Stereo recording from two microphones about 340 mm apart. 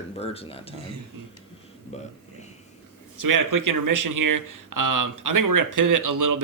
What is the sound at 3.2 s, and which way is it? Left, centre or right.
Speech, right.